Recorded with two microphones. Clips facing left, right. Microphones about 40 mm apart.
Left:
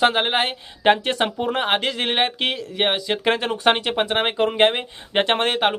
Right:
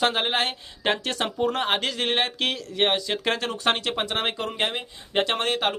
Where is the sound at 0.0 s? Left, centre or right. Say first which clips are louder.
Left 4 dB; centre.